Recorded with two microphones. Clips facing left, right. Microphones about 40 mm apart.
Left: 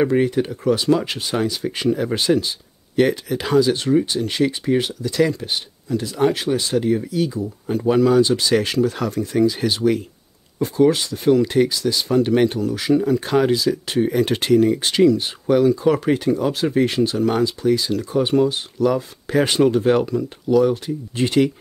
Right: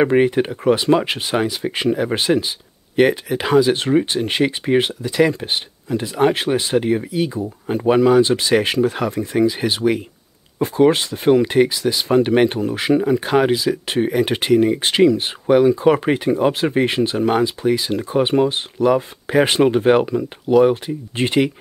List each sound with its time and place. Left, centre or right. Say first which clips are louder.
0.0 s speech: right 3 dB; right
10.6 s speech: right 2 dB; right